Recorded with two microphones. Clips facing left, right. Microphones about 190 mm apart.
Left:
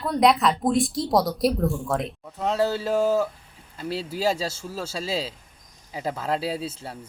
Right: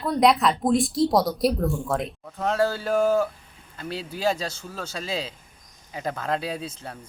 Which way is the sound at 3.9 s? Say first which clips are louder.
Left 1 dB; 30° left (ahead or behind).